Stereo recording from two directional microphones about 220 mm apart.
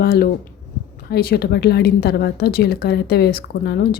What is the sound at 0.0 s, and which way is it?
A woman's voice, 45° left (ahead or behind).